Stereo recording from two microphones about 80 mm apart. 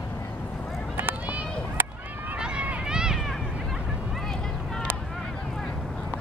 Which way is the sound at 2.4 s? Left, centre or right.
Centre.